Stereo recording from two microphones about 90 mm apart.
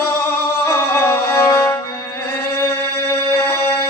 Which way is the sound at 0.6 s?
30° left (ahead or behind).